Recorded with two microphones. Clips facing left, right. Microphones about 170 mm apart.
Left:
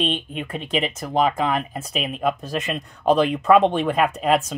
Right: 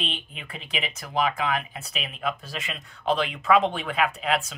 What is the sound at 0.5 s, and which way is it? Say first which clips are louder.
Speech: left 9 dB; 45° left (ahead or behind).